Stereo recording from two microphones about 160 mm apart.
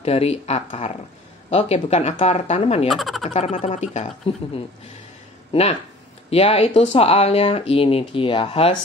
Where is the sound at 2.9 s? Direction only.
Centre (ahead or behind).